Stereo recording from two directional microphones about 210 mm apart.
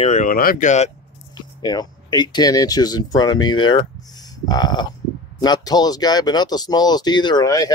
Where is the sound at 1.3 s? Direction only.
20° left (ahead or behind).